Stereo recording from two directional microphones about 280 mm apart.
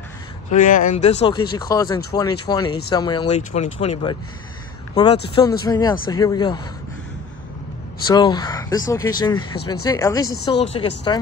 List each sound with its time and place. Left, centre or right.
0.5 s speech: left
8.1 s speech: centre
10.2 s speech: left